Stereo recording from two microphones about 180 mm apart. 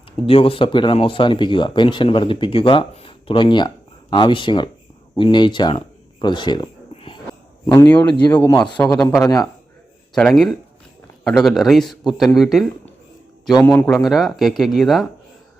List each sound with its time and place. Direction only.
0.3 s speech: 30° left (ahead or behind)
7.8 s speech: 10° left (ahead or behind)
10.2 s speech: centre (ahead or behind)
13.7 s speech: 5° left (ahead or behind)